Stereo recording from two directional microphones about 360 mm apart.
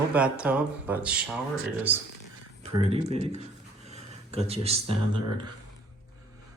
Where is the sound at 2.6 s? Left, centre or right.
Centre.